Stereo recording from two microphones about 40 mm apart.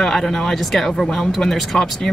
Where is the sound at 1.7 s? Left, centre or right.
Left.